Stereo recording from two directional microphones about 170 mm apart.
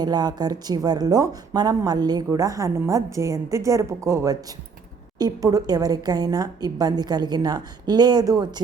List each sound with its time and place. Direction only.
0.0 s a woman's voice: 25° right (ahead or behind)